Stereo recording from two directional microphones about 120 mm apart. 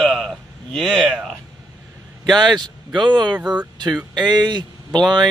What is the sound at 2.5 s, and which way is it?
Speech, 40° right (ahead or behind).